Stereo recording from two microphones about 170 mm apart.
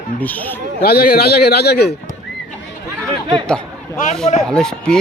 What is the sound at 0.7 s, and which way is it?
A man's voice, 65° left (ahead or behind).